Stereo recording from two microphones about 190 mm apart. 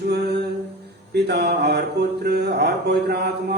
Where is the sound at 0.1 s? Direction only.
60° right (ahead or behind).